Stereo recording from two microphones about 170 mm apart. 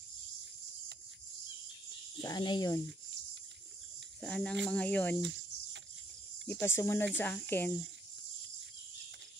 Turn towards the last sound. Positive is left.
turn(degrees=10)  # may be behind; listen again after turning